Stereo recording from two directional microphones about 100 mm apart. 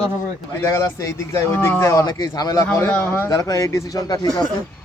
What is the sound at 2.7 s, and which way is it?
Speech, 25° left (ahead or behind).